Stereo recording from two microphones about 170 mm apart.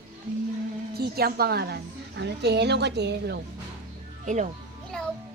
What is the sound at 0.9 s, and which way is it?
A woman's voice, 65° right (ahead or behind).